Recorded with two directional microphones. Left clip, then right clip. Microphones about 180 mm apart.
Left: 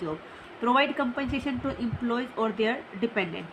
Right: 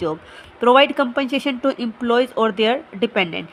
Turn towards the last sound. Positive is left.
turn(degrees=-65)  # may be behind; listen again after turning